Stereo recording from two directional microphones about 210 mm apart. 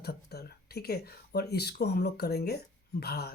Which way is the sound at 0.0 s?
50° left (ahead or behind).